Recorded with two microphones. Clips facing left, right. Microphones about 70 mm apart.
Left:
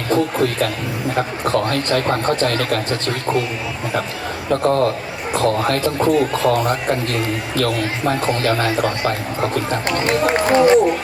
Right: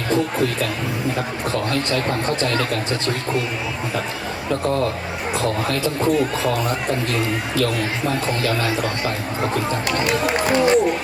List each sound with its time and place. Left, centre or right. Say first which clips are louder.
0.1 s a man's voice: left 3 dB; left
4.6 s a man's voice: left 5 dB; left